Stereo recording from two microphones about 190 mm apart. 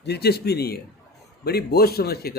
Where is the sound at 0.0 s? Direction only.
60° left (ahead or behind).